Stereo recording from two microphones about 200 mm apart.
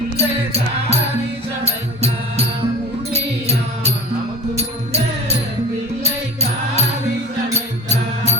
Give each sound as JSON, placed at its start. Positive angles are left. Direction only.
{"t": 0.2, "sound": "music", "side_deg": -30}
{"t": 7.9, "sound": "music", "side_deg": -35}